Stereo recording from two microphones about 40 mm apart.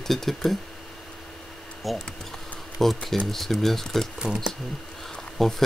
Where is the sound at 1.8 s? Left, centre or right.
Centre.